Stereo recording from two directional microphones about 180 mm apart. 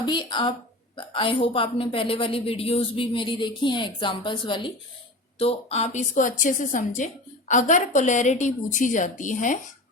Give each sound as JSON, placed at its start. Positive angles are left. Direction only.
{"t": 0.0, "sound": "a woman's voice", "side_deg": 25}